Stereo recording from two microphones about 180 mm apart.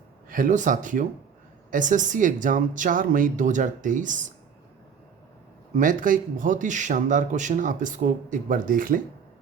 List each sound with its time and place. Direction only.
0.3 s speech: 50° right (ahead or behind)
5.7 s speech: 45° right (ahead or behind)